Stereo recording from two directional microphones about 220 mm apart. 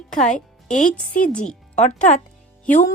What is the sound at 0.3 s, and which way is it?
A woman's voice, 35° left (ahead or behind).